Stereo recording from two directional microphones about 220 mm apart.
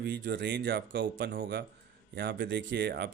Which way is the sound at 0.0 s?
50° right (ahead or behind).